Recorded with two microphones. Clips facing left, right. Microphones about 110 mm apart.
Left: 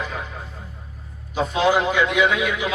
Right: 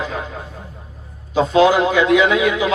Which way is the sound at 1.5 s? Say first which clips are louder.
Right 5 dB; 90° right.